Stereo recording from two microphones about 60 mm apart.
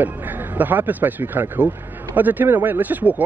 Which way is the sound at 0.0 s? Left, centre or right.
Right.